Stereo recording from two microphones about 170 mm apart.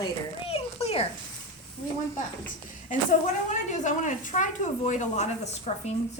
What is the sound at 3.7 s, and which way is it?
A woman's voice, 45° left (ahead or behind).